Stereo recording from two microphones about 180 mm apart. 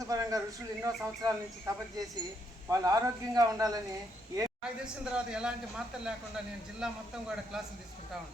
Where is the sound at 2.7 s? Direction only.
20° right (ahead or behind).